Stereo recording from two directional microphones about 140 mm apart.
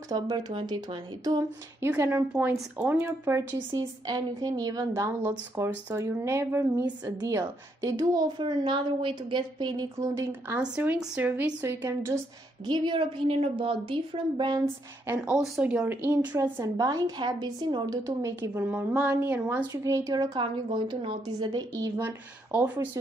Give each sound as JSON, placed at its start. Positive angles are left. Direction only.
{"t": 0.1, "sound": "a woman's voice", "side_deg": -30}
{"t": 1.8, "sound": "a woman's voice", "side_deg": -20}
{"t": 10.6, "sound": "a woman's voice", "side_deg": -10}
{"t": 12.6, "sound": "a woman's voice", "side_deg": -35}
{"t": 15.0, "sound": "a woman's voice", "side_deg": -10}
{"t": 16.3, "sound": "speech", "side_deg": -25}
{"t": 19.7, "sound": "speech", "side_deg": -25}
{"t": 20.3, "sound": "a woman's voice", "side_deg": -35}
{"t": 21.9, "sound": "a woman's voice", "side_deg": -15}